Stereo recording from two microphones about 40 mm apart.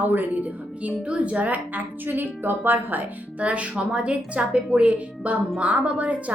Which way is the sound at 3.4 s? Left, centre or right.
Right.